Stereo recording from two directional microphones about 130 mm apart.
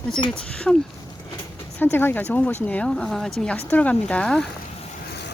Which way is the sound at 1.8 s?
15° left (ahead or behind).